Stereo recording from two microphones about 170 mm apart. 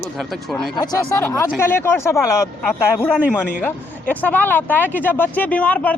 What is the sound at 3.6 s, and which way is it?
Speech, 10° left (ahead or behind).